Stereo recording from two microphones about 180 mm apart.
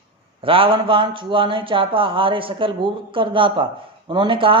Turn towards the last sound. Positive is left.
turn(degrees=-30)  # may be behind; listen again after turning